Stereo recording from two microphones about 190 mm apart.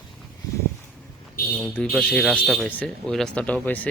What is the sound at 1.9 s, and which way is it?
Speech, centre (ahead or behind).